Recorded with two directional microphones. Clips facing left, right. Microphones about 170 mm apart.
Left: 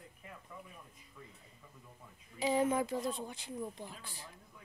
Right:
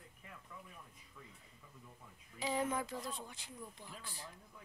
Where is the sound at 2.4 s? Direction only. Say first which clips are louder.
Left 6 dB; 15° left (ahead or behind).